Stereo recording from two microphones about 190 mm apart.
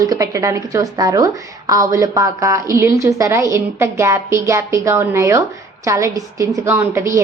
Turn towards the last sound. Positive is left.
turn(degrees=-15)  # may be behind; listen again after turning